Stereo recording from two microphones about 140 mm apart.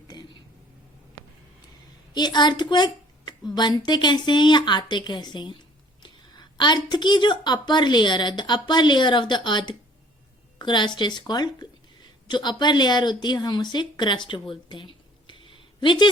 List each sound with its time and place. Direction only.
2.1 s a woman's voice: 30° left (ahead or behind)